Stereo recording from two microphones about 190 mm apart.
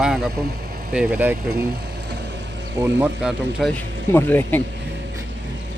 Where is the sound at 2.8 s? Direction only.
10° right (ahead or behind).